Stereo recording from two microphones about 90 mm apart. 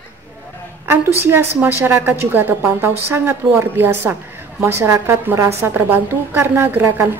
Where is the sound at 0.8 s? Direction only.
25° right (ahead or behind).